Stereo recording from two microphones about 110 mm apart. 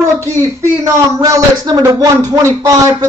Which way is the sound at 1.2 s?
30° right (ahead or behind).